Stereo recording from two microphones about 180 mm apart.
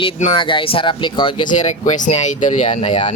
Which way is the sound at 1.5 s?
45° left (ahead or behind).